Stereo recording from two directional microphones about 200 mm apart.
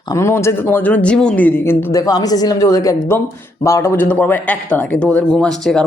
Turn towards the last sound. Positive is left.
turn(degrees=0)  # may be behind; listen again after turning